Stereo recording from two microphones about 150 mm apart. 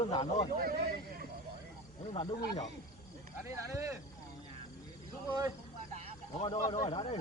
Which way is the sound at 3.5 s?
20° right (ahead or behind).